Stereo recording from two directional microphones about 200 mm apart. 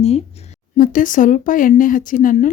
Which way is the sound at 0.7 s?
45° left (ahead or behind).